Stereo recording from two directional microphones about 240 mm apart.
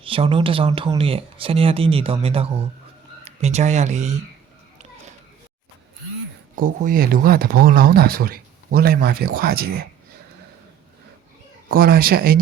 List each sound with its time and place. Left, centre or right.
0.0 s speech: right
6.6 s speech: right
11.7 s speech: right